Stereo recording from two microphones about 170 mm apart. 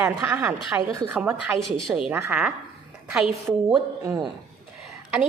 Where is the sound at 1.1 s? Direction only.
5° right (ahead or behind).